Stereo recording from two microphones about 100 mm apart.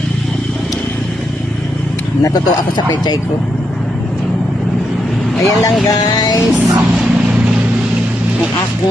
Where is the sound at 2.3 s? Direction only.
40° left (ahead or behind).